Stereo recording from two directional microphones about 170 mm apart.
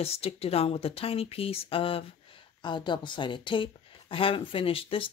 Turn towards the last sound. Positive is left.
turn(degrees=30)  # may be behind; listen again after turning